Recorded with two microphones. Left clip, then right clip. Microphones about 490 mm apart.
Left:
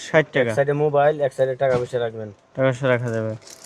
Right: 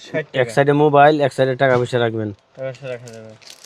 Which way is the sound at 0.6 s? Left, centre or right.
Right.